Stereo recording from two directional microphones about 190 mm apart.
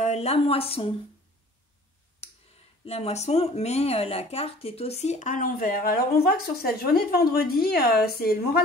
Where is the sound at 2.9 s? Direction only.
35° left (ahead or behind).